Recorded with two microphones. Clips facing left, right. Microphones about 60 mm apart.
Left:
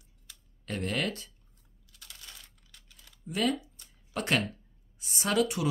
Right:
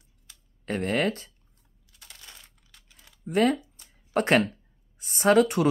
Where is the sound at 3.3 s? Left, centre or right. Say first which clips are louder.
Right 7 dB; right.